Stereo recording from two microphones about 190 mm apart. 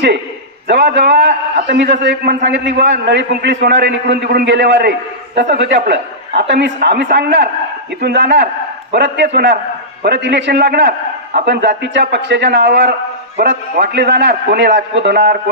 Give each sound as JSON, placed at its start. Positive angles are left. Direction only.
{"t": 0.7, "sound": "a man's voice", "side_deg": -65}